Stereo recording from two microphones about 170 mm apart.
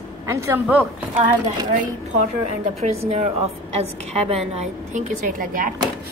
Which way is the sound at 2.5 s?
40° right (ahead or behind).